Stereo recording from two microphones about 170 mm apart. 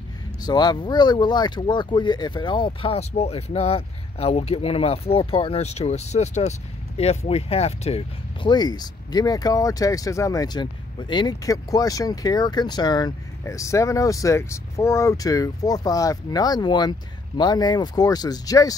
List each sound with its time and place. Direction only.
0.4 s speech: 25° left (ahead or behind)